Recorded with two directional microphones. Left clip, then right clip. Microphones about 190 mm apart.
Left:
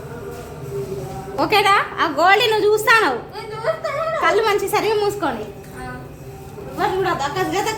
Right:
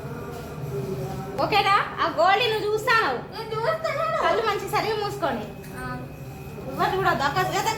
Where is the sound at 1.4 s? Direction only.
65° left (ahead or behind).